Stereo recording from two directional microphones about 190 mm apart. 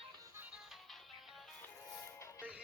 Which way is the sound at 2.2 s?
15° left (ahead or behind).